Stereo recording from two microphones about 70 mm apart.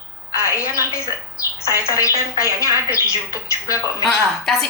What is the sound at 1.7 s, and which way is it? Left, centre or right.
Speech, right.